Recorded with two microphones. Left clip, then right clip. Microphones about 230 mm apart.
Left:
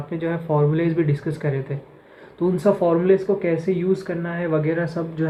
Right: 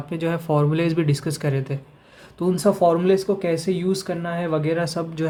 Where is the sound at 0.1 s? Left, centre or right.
Right.